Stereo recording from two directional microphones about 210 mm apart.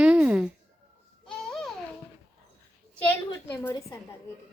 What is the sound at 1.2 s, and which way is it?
Babbling, centre (ahead or behind).